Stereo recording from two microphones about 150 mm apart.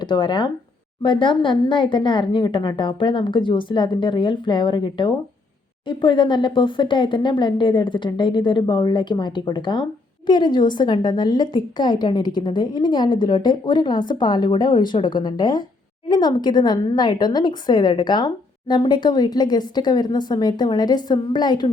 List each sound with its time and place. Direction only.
0.0 s a woman's voice: 30° left (ahead or behind)